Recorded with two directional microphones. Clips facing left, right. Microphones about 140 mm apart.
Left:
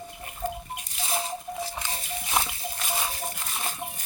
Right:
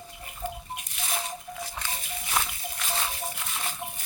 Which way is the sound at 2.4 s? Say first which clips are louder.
Left 2 dB; 20° left (ahead or behind).